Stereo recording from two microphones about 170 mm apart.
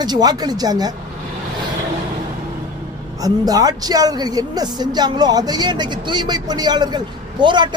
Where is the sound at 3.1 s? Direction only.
20° right (ahead or behind).